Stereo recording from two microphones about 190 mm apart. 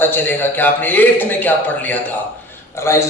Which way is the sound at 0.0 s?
10° left (ahead or behind).